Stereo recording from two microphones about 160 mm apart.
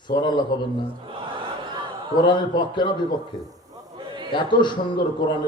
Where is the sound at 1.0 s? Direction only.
30° right (ahead or behind).